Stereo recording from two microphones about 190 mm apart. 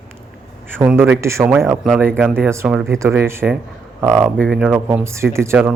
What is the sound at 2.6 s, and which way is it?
Speech, centre (ahead or behind).